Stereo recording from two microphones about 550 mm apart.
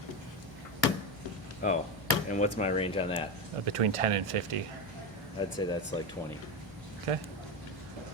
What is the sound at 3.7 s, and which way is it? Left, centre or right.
Speech, right.